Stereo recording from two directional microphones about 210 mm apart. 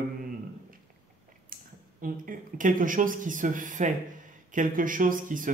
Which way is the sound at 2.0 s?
40° right (ahead or behind).